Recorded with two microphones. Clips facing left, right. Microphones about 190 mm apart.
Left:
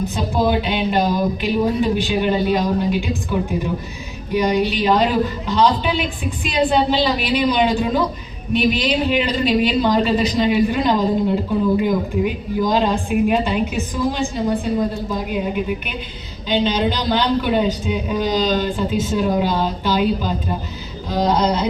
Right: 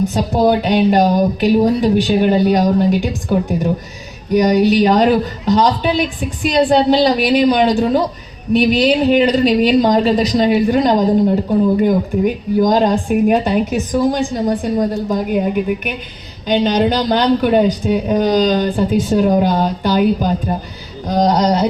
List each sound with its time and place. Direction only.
0.1 s a man's voice: 45° right (ahead or behind)